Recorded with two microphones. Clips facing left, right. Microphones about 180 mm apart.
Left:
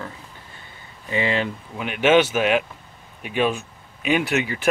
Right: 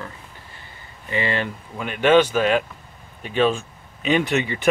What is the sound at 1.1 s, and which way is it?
Speech, 15° left (ahead or behind).